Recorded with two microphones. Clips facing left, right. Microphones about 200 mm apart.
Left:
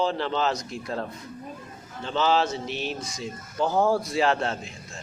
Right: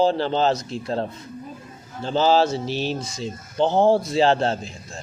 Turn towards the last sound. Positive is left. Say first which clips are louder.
# right 5 dB
turn(degrees=-30)  # may be behind; listen again after turning